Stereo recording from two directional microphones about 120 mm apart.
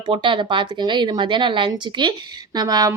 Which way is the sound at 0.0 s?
40° right (ahead or behind).